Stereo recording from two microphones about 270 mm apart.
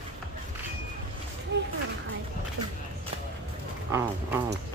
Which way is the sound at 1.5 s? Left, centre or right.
Right.